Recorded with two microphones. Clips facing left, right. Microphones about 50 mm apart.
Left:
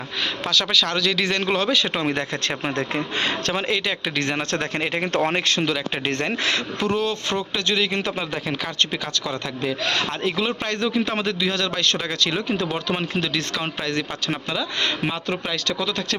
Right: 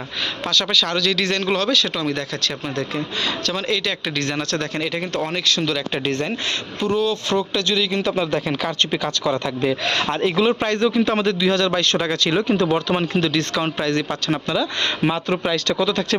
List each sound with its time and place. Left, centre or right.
0.4 s speech: centre
2.0 s speech: left
3.7 s speech: centre
5.6 s speech: centre
6.1 s speech: left
7.7 s speech: left
8.2 s a man's voice: centre
9.2 s a man's voice: centre